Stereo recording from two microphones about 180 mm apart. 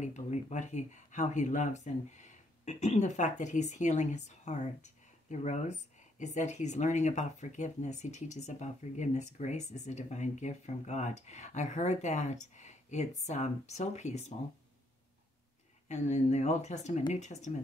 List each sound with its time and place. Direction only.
0.0 s speech: 40° left (ahead or behind)
15.9 s speech: 40° left (ahead or behind)